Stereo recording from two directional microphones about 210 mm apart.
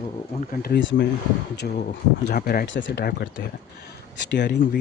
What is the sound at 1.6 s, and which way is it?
Speech, 45° left (ahead or behind).